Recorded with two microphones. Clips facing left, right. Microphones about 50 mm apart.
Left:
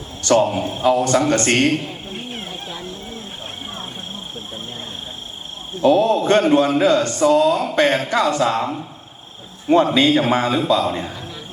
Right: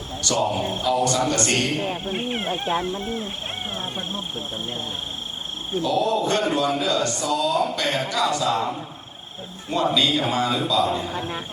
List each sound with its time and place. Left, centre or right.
0.2 s a man's voice: left
1.8 s speech: right
5.8 s speech: left
9.6 s a man's voice: left